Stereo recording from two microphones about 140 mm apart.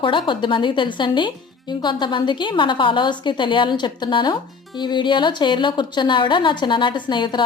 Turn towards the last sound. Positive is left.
turn(degrees=35)  # may be behind; listen again after turning